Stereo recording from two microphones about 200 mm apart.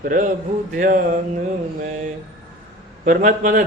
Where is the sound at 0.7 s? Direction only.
40° right (ahead or behind).